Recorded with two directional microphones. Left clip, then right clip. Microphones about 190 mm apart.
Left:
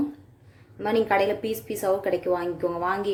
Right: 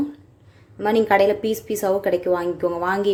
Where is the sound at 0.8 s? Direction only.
20° right (ahead or behind).